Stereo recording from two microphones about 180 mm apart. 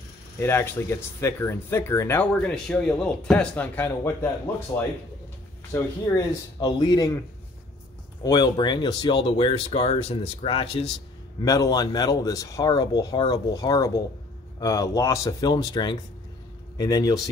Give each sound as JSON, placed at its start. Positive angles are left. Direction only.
{"t": 0.4, "sound": "speech", "side_deg": 15}
{"t": 5.7, "sound": "speech", "side_deg": 20}
{"t": 8.2, "sound": "speech", "side_deg": 20}
{"t": 11.4, "sound": "a man's voice", "side_deg": 20}